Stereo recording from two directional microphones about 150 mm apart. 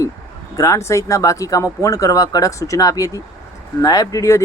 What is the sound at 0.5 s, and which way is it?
Speech, 20° left (ahead or behind).